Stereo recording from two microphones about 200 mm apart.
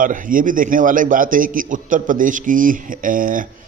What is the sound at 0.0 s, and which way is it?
A man's voice, 40° right (ahead or behind).